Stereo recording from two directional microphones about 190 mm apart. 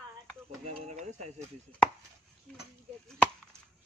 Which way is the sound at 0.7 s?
35° right (ahead or behind).